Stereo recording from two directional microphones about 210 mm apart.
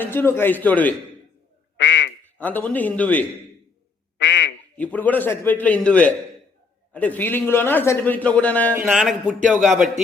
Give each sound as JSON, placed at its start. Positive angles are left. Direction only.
{"t": 0.0, "sound": "a man's voice", "side_deg": 10}
{"t": 1.8, "sound": "quack", "side_deg": 55}
{"t": 2.2, "sound": "a man's voice", "side_deg": 10}
{"t": 4.2, "sound": "quack", "side_deg": 55}
{"t": 4.8, "sound": "a man's voice", "side_deg": 5}